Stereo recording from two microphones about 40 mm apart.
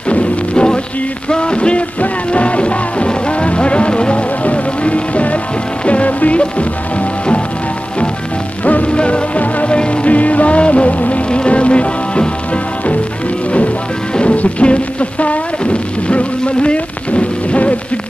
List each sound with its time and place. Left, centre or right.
0.1 s music: left
8.8 s music: left
14.1 s music: left